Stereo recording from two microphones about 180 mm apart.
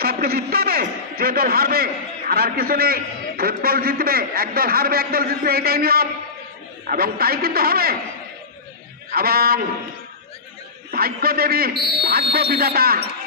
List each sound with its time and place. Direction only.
0.0 s a man's voice: 55° right (ahead or behind)
9.1 s a man's voice: 60° right (ahead or behind)
10.9 s a man's voice: 60° right (ahead or behind)